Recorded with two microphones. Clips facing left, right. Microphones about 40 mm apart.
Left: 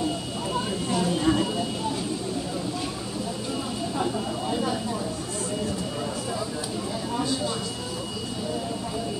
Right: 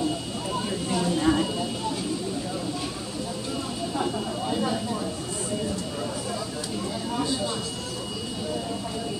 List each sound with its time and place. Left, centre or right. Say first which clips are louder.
0.8 s vehicle: right 1 dB; centre
4.0 s vehicle: left 1 dB; centre